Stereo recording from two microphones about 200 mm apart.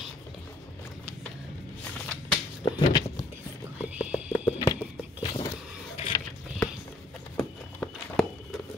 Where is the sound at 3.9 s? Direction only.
5° right (ahead or behind).